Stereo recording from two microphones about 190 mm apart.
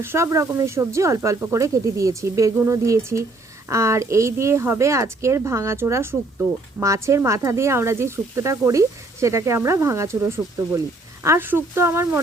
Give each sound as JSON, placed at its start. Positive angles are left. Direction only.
{"t": 0.0, "sound": "speech", "side_deg": -15}